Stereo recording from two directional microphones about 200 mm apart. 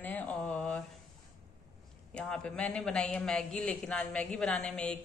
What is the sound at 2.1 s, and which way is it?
A man's voice, 5° left (ahead or behind).